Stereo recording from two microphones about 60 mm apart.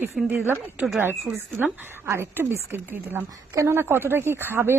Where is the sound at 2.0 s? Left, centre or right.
Right.